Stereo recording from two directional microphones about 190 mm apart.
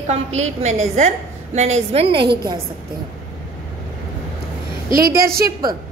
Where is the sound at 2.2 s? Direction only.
60° right (ahead or behind).